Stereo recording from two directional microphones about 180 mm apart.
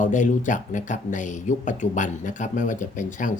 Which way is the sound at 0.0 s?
45° left (ahead or behind).